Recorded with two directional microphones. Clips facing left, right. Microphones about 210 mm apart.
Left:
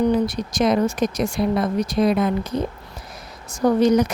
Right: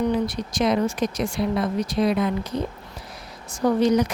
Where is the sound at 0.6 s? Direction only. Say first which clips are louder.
Left 3 dB; 45° left (ahead or behind).